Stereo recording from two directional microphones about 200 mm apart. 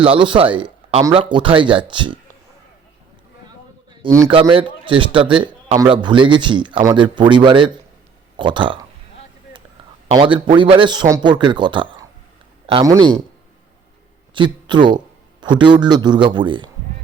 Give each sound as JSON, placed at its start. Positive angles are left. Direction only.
{"t": 0.0, "sound": "a man's voice", "side_deg": -25}
{"t": 4.3, "sound": "a man's voice", "side_deg": -25}
{"t": 10.1, "sound": "a man's voice", "side_deg": -25}
{"t": 14.3, "sound": "a man's voice", "side_deg": -25}